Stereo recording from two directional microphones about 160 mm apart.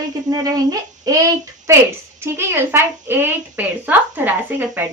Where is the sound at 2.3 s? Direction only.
15° right (ahead or behind).